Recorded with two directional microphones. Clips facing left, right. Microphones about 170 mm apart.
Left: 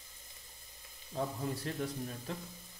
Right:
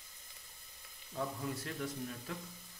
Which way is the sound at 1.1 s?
30° left (ahead or behind).